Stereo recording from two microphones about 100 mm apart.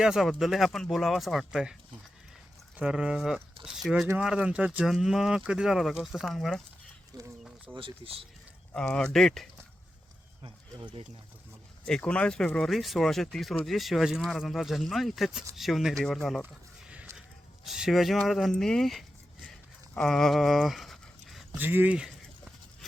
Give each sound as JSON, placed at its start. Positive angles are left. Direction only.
{"t": 0.0, "sound": "speech", "side_deg": -5}
{"t": 2.7, "sound": "speech", "side_deg": -10}
{"t": 4.8, "sound": "speech", "side_deg": -5}
{"t": 7.1, "sound": "speech", "side_deg": -40}
{"t": 7.8, "sound": "speech", "side_deg": -60}
{"t": 8.7, "sound": "speech", "side_deg": 10}
{"t": 11.9, "sound": "speech", "side_deg": 10}
{"t": 17.7, "sound": "speech", "side_deg": -5}
{"t": 20.1, "sound": "a sound", "side_deg": 5}
{"t": 21.6, "sound": "speech", "side_deg": -20}
{"t": 22.8, "sound": "a sound", "side_deg": 0}